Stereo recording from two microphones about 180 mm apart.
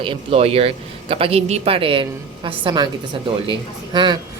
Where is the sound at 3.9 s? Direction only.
25° right (ahead or behind).